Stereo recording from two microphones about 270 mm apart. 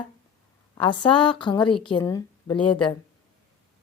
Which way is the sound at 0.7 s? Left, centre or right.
Centre.